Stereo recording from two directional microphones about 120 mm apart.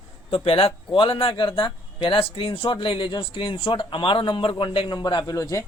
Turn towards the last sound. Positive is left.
turn(degrees=30)  # may be behind; listen again after turning